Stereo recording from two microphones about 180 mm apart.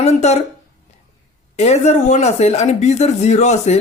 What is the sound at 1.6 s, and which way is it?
Speech, 40° left (ahead or behind).